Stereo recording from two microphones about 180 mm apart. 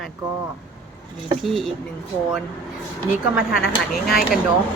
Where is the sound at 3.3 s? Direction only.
5° right (ahead or behind).